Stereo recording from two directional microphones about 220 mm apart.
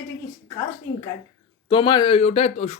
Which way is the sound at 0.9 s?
55° left (ahead or behind).